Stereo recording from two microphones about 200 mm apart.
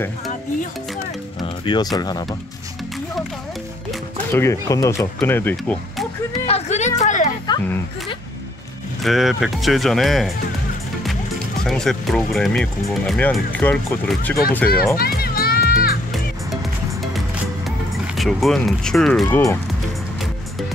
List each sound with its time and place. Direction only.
1.4 s speech: 20° left (ahead or behind)
4.3 s speech: 15° left (ahead or behind)
6.4 s a sound: 30° left (ahead or behind)
7.0 s music: 40° left (ahead or behind)
9.0 s speech: centre (ahead or behind)
11.6 s speech: centre (ahead or behind)
15.0 s children playing: 50° left (ahead or behind)
18.1 s speech: centre (ahead or behind)